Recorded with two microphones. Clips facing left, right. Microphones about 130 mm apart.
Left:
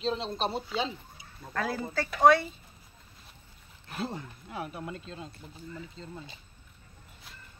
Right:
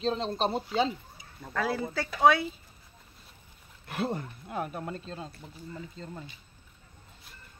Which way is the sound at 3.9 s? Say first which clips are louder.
Right 4 dB; 60° right (ahead or behind).